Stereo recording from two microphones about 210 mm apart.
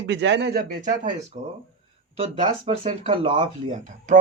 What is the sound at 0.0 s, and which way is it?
Speech, 60° right (ahead or behind).